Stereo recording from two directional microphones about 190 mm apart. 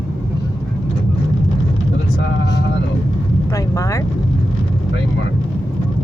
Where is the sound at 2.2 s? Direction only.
65° left (ahead or behind).